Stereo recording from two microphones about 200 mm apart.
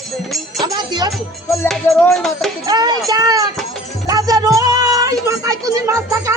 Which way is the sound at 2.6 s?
20° right (ahead or behind).